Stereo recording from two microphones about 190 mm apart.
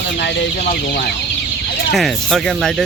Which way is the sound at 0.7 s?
55° left (ahead or behind).